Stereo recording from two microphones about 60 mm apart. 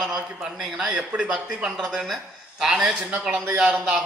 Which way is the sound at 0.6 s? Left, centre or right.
Centre.